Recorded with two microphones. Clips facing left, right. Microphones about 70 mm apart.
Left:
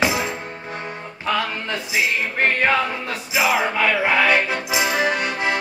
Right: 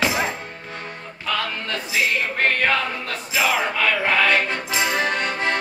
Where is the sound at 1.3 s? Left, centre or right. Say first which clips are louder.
Left 2 dB; centre.